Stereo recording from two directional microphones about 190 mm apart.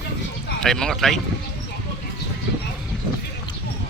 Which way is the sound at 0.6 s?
Centre (ahead or behind).